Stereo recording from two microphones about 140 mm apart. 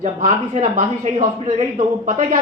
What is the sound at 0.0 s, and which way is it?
Speech, 65° right (ahead or behind).